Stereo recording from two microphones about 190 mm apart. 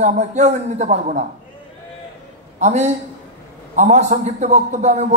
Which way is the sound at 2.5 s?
40° right (ahead or behind).